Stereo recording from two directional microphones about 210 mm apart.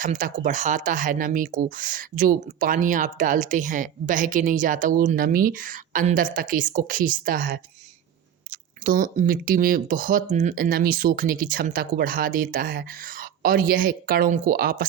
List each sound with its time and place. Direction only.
0.0 s speech: 40° right (ahead or behind)
8.8 s speech: 40° right (ahead or behind)